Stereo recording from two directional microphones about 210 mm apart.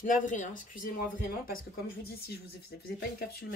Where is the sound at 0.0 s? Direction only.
40° left (ahead or behind).